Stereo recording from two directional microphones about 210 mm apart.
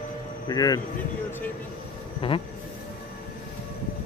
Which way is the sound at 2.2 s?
25° left (ahead or behind).